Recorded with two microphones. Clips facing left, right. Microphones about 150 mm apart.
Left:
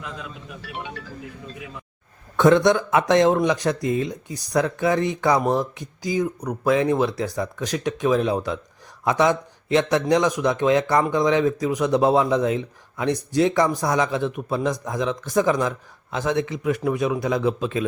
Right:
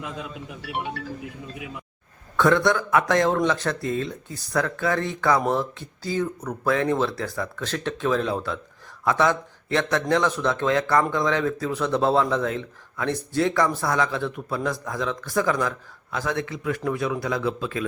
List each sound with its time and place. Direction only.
0.0 s speech: 20° right (ahead or behind)
2.3 s speech: 20° left (ahead or behind)